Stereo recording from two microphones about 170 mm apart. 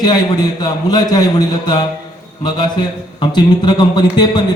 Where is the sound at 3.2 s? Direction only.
25° left (ahead or behind).